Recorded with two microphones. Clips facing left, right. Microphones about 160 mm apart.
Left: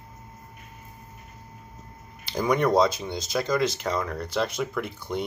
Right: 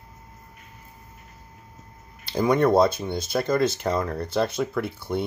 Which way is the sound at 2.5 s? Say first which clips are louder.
Right 2 dB; 25° right (ahead or behind).